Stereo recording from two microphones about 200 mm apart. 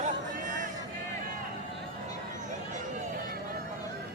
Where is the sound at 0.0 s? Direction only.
40° right (ahead or behind).